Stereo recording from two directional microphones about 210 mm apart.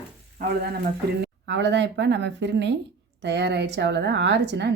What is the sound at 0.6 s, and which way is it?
A woman's voice, 50° right (ahead or behind).